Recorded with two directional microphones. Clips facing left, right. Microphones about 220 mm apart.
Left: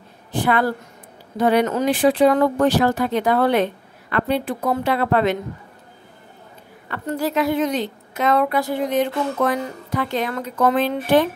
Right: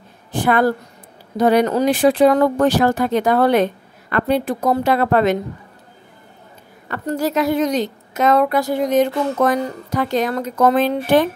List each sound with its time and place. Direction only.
0.3 s a woman's voice: 45° right (ahead or behind)
6.9 s a woman's voice: 40° right (ahead or behind)